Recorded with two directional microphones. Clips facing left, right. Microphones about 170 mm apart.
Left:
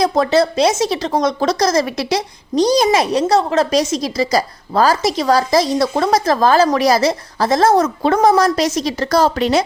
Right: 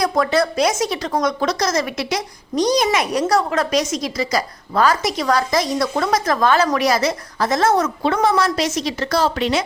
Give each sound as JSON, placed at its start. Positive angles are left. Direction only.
{"t": 0.0, "sound": "speech", "side_deg": 25}